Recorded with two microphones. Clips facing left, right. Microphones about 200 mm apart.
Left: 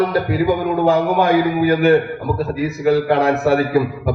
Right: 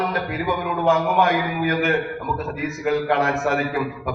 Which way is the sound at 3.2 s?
35° left (ahead or behind).